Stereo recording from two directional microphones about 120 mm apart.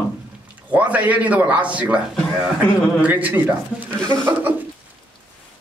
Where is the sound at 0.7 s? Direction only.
10° right (ahead or behind).